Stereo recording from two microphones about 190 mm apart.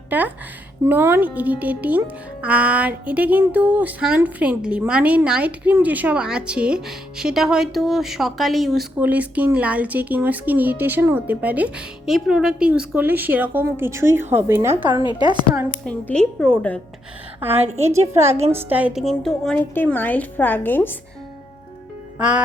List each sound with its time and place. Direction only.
0.1 s a child's voice: 10° right (ahead or behind)
15.8 s a woman's voice: 5° left (ahead or behind)
17.4 s a child's voice: 10° right (ahead or behind); by 20.9 s 10° left (ahead or behind)
22.2 s a woman's voice: 5° right (ahead or behind)